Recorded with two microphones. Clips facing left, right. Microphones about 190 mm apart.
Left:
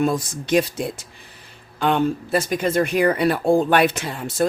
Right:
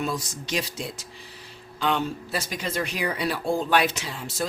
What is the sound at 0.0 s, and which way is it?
Speech, 55° left (ahead or behind).